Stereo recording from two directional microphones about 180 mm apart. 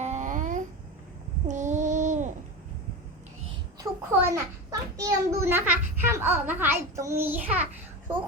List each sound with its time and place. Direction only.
0.0 s babbling: 40° right (ahead or behind)
1.5 s child singing: 40° right (ahead or behind)
3.8 s a child's voice: 15° right (ahead or behind)